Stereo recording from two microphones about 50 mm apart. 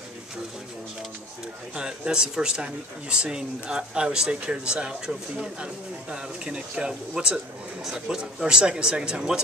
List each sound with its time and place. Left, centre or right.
1.8 s speech: centre